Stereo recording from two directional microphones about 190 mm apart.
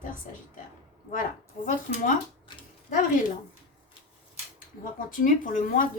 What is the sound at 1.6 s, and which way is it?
Speech, 45° left (ahead or behind).